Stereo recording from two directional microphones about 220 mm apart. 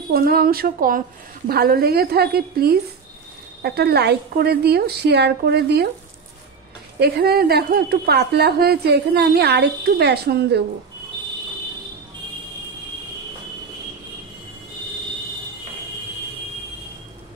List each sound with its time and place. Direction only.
0.1 s speech: 45° right (ahead or behind)
7.0 s speech: 45° right (ahead or behind)